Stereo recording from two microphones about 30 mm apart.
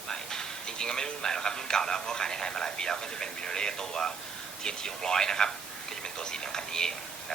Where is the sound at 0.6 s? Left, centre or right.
Left.